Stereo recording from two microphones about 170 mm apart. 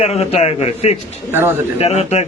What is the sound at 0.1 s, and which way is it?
Speech, 35° left (ahead or behind).